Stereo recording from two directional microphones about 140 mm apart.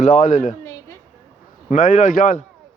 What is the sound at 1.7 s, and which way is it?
Speech, 60° left (ahead or behind).